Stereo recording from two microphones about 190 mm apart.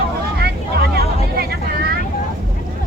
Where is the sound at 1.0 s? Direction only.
55° right (ahead or behind).